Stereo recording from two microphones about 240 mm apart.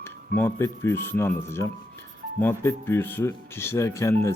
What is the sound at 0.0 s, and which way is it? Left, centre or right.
Speech, centre.